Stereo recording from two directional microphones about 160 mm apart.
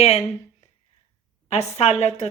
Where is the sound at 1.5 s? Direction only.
45° left (ahead or behind).